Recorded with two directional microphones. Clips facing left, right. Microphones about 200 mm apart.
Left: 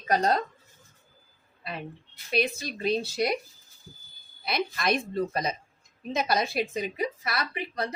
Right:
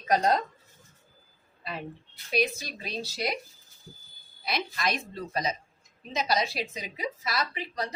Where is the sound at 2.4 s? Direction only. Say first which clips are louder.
Left 1 dB; 55° left (ahead or behind).